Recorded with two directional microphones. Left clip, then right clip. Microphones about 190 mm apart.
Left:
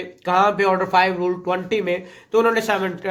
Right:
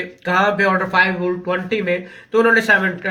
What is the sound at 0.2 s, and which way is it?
Speech, 20° left (ahead or behind).